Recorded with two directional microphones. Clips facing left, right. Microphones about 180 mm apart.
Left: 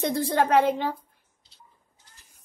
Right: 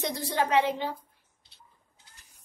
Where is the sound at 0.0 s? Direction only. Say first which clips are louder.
Left 5 dB; 55° left (ahead or behind).